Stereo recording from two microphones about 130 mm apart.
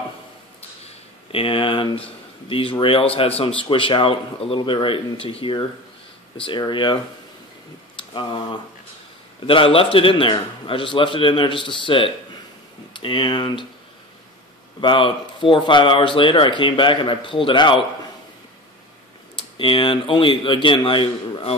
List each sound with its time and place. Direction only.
0.8 s a sound: 45° left (ahead or behind)
2.5 s a man's voice: 40° left (ahead or behind)
8.1 s speech: 40° left (ahead or behind)
14.8 s speech: 40° left (ahead or behind)
19.5 s speech: 40° left (ahead or behind)